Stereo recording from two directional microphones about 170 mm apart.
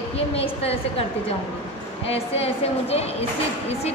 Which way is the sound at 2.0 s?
35° left (ahead or behind).